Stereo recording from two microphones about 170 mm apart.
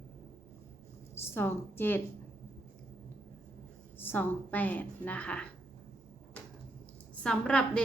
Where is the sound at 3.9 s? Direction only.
10° left (ahead or behind).